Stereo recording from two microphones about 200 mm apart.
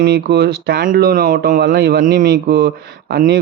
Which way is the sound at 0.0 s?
55° right (ahead or behind).